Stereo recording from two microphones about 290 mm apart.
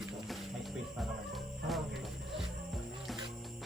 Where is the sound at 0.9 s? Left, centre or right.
Centre.